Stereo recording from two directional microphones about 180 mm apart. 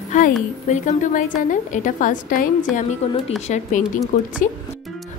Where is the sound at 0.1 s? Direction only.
45° left (ahead or behind).